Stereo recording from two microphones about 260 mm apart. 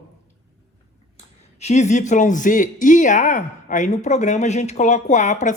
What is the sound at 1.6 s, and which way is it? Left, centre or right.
Speech, left.